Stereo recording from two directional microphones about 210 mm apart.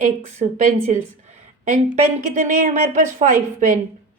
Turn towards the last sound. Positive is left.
turn(degrees=-35)  # may be behind; listen again after turning